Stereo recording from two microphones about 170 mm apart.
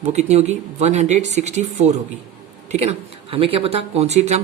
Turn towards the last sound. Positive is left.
turn(degrees=-40)  # may be behind; listen again after turning